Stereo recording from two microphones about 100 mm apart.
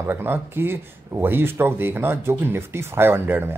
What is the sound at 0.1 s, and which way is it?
Speech, 20° right (ahead or behind).